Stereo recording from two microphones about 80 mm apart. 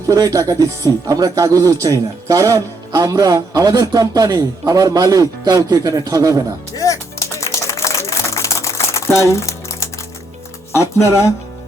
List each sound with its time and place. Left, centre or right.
0.1 s speech: right
6.7 s music: left
9.1 s crumpling: left
10.7 s speech: left